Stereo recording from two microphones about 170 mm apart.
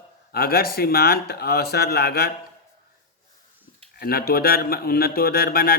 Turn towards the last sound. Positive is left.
turn(degrees=60)  # may be behind; listen again after turning